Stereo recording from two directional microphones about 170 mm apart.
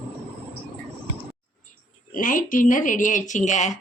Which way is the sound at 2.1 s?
50° left (ahead or behind).